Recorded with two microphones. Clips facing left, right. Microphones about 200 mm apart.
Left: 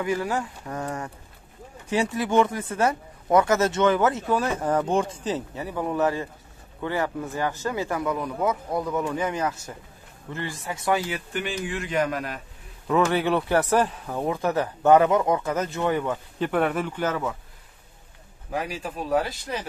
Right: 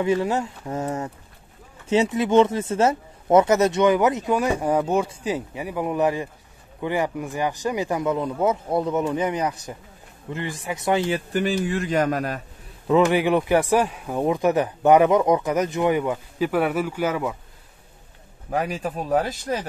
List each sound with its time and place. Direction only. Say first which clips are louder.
0.0 s speech: right 4 dB; 25° right (ahead or behind); by 12.4 s 45° right (ahead or behind)
12.8 s speech: right 4 dB; 15° right (ahead or behind)
18.5 s speech: right 5 dB; 50° right (ahead or behind)